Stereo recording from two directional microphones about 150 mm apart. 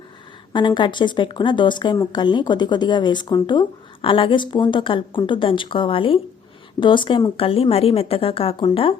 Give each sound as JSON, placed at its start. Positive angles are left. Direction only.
{"t": 0.5, "sound": "speech", "side_deg": 30}